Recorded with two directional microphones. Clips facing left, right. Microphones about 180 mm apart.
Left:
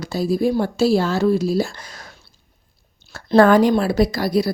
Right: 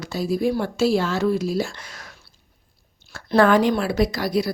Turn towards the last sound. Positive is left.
turn(degrees=35)  # may be behind; listen again after turning